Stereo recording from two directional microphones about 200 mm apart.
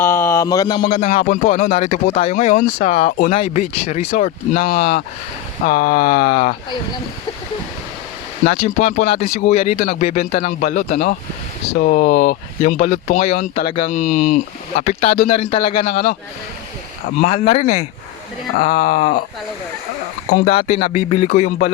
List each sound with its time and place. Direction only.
0.0 s speech: 10° left (ahead or behind)
1.1 s speech: 40° left (ahead or behind)
4.5 s speech: 45° left (ahead or behind)
8.4 s speech: 35° left (ahead or behind)
13.8 s speech: 45° left (ahead or behind)
20.3 s speech: 30° left (ahead or behind)